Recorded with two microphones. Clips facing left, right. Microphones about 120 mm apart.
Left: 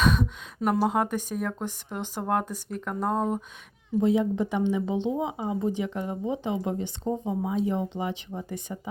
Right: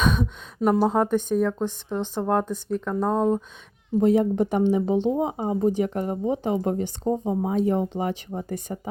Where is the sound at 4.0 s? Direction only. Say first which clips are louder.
Right 4 dB; 45° right (ahead or behind).